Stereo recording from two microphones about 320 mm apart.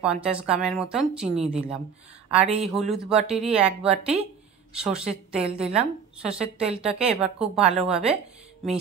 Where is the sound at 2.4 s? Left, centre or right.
Centre.